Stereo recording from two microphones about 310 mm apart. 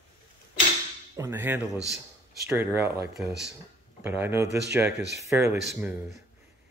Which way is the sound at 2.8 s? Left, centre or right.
Right.